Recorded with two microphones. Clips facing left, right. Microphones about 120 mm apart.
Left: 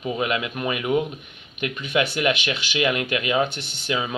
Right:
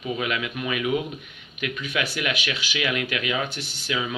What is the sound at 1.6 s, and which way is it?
Speech, 25° left (ahead or behind).